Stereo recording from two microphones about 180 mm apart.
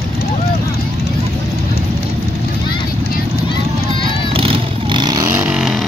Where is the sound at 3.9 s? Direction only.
30° left (ahead or behind).